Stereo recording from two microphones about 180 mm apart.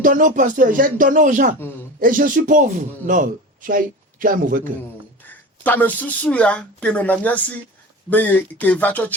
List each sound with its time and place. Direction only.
0.0 s speech: 50° right (ahead or behind)
5.6 s speech: 10° left (ahead or behind)